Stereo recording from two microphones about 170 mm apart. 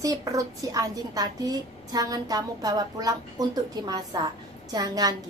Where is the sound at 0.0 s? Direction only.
20° right (ahead or behind).